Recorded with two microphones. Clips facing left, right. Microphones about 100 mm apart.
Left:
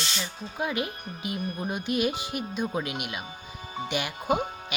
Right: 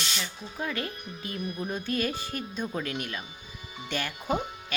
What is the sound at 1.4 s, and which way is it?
Speech, 35° left (ahead or behind).